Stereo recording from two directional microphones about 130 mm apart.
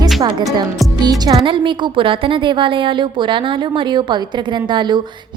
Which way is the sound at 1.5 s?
40° right (ahead or behind).